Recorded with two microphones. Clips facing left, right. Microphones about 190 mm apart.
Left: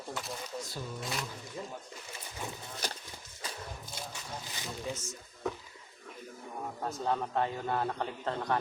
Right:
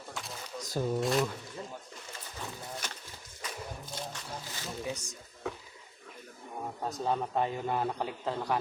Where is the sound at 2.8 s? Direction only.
35° left (ahead or behind).